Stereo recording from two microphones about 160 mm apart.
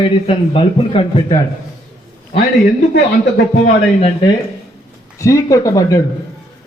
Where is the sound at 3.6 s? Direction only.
35° left (ahead or behind).